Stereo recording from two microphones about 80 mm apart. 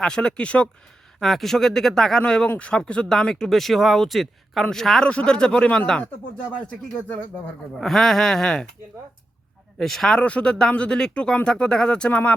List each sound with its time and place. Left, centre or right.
0.0 s speech: centre
1.2 s speech: centre
7.8 s speech: centre
9.7 s speech: centre
10.2 s speech: centre